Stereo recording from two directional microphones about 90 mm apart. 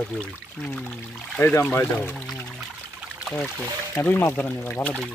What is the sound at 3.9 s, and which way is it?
Speech, 25° left (ahead or behind).